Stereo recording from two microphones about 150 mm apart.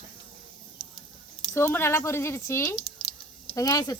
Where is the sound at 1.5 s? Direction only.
15° left (ahead or behind).